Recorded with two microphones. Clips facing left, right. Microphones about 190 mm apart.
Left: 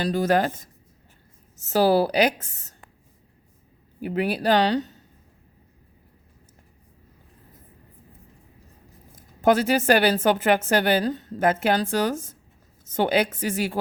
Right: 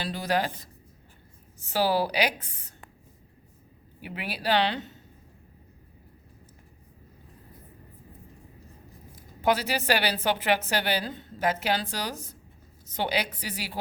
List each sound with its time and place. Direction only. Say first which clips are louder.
0.0 s a woman's voice: left 7 dB; 45° left (ahead or behind)
4.0 s speech: left 8 dB; 45° left (ahead or behind)
9.1 s a woman's voice: left 6 dB; 50° left (ahead or behind)